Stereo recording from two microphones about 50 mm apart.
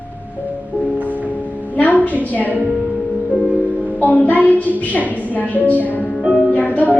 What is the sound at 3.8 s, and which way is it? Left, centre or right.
Music, left.